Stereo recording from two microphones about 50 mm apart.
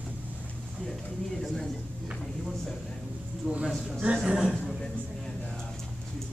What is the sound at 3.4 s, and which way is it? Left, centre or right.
Speech, right.